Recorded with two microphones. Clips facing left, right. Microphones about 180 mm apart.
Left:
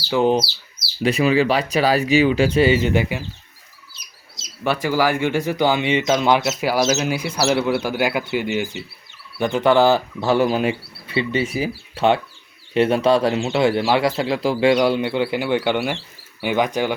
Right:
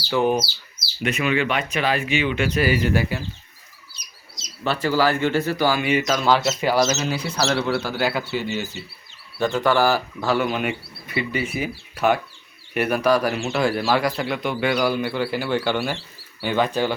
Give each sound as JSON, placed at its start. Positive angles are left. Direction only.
{"t": 0.1, "sound": "speech", "side_deg": 20}
{"t": 1.0, "sound": "speech", "side_deg": 35}
{"t": 4.6, "sound": "speech", "side_deg": 15}